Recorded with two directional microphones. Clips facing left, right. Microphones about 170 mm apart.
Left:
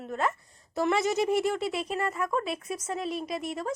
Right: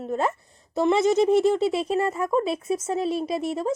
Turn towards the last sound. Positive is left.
turn(degrees=-30)  # may be behind; listen again after turning